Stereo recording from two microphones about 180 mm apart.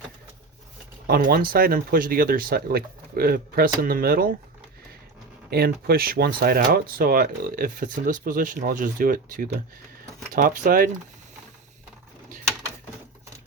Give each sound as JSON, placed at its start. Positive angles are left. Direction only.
{"t": 1.0, "sound": "speech", "side_deg": -55}
{"t": 5.5, "sound": "speech", "side_deg": -60}